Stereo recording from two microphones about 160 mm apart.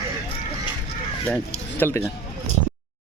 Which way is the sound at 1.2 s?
10° left (ahead or behind).